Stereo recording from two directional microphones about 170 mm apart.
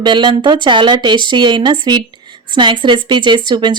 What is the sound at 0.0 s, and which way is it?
A woman's voice, 25° right (ahead or behind).